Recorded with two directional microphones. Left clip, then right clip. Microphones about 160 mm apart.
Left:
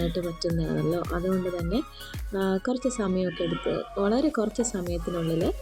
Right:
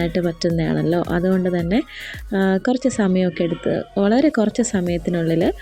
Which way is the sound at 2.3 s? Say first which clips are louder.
Right 8 dB; 50° right (ahead or behind).